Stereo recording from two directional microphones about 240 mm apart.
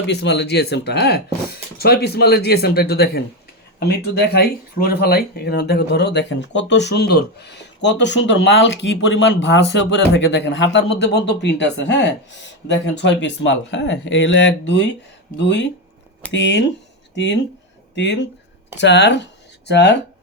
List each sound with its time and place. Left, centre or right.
0.1 s speech: left
17.9 s speech: left